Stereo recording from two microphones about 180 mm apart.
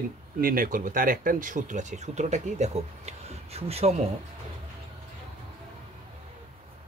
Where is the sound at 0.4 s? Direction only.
50° right (ahead or behind); by 4.0 s 35° right (ahead or behind).